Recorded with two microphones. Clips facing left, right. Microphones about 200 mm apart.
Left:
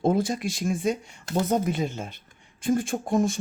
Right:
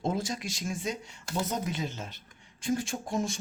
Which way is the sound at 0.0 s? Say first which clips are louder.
Left 8 dB; 55° left (ahead or behind).